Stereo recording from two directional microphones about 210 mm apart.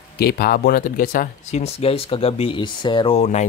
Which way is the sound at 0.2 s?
45° left (ahead or behind).